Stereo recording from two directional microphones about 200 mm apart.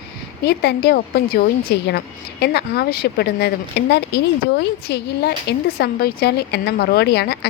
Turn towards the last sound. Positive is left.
turn(degrees=55)  # may be behind; listen again after turning